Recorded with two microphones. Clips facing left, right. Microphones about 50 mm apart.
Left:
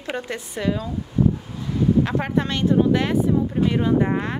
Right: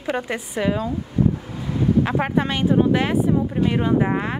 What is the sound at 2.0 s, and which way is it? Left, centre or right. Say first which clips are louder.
Speech: right 2 dB; centre.